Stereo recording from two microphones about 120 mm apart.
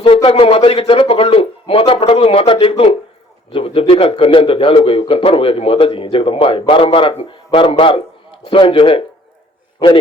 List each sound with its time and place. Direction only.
0.0 s speech: 50° left (ahead or behind)